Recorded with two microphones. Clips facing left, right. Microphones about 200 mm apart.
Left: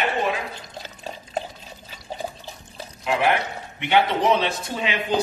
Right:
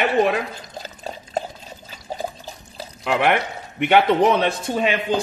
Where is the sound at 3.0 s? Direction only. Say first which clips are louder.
Right 2 dB; 65° right (ahead or behind).